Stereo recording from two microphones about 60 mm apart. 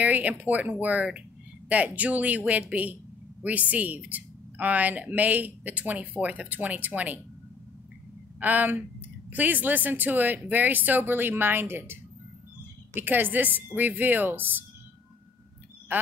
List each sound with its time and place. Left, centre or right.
0.0 s a woman's voice: right
8.4 s a woman's voice: right
15.9 s speech: right